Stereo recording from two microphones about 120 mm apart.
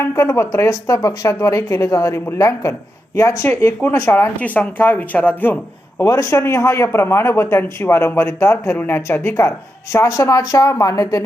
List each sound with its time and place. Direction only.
0.0 s speech: 20° left (ahead or behind)
3.8 s speech: 15° left (ahead or behind)
6.0 s speech: 25° left (ahead or behind)